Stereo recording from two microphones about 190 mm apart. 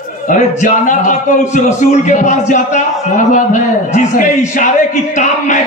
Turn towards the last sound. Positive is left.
turn(degrees=40)  # may be behind; listen again after turning